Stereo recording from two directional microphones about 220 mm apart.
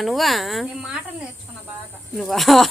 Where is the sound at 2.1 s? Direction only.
Centre (ahead or behind).